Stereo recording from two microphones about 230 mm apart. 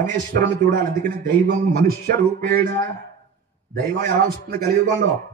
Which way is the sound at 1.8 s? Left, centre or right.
Right.